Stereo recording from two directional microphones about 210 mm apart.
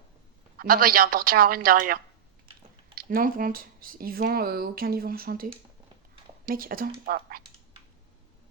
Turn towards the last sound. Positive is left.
turn(degrees=-45)  # may be behind; listen again after turning